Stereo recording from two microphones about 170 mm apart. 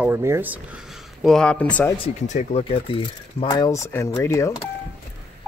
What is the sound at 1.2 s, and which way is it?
Speech, 5° left (ahead or behind).